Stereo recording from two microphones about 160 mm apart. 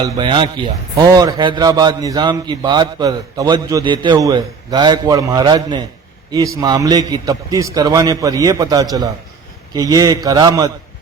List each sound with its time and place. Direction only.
0.0 s speech: 30° right (ahead or behind)